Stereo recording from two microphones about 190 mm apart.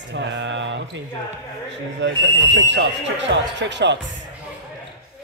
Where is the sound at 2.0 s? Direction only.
75° right (ahead or behind).